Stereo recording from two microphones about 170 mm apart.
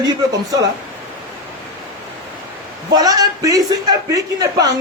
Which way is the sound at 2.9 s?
20° right (ahead or behind).